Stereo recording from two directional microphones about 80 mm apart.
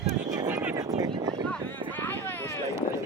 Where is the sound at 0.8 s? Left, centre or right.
Right.